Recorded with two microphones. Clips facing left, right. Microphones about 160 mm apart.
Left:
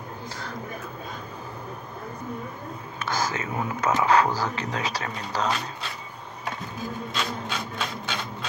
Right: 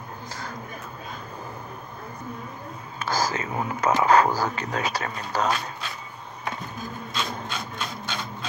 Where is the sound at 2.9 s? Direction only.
35° right (ahead or behind).